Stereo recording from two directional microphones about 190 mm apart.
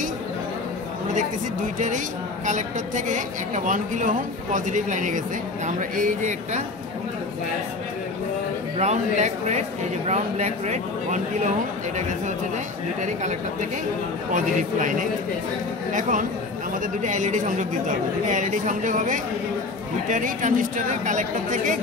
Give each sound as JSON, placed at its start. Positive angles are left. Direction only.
{"t": 3.1, "sound": "a woman's voice", "side_deg": -40}
{"t": 8.7, "sound": "a woman's voice", "side_deg": -35}
{"t": 13.0, "sound": "a woman's voice", "side_deg": -40}